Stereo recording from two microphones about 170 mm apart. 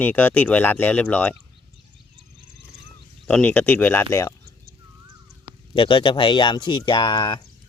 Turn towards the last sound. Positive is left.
turn(degrees=30)  # may be behind; listen again after turning